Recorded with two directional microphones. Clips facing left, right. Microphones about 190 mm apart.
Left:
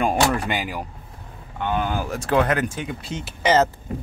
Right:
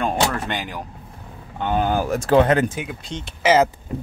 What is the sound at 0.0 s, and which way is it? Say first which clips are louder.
Door: left 1 dB; 10° left (ahead or behind).